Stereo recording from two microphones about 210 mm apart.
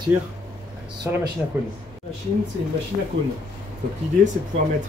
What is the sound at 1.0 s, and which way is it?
Speech, 10° right (ahead or behind).